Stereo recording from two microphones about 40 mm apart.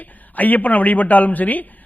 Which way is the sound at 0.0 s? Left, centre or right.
Left.